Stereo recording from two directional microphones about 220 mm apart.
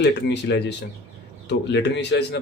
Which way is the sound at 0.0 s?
50° left (ahead or behind).